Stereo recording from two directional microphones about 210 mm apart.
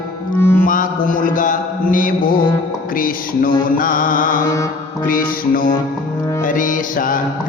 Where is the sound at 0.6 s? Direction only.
40° left (ahead or behind).